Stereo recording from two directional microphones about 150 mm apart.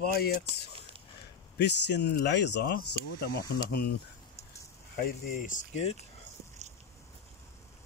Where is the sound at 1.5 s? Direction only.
90° left.